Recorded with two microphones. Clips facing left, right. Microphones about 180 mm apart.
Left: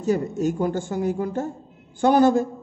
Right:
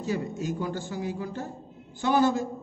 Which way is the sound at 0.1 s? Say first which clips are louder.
Left 8 dB; 40° left (ahead or behind).